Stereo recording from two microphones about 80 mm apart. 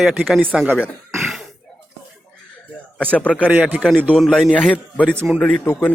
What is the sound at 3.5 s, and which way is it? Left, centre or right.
Speech, right.